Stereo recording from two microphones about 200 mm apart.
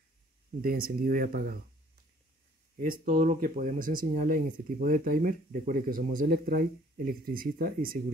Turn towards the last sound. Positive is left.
turn(degrees=-45)  # may be behind; listen again after turning